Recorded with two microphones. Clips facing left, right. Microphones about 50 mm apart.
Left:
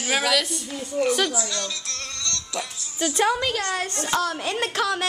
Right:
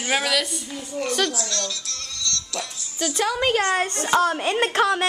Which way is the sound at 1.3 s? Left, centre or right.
Centre.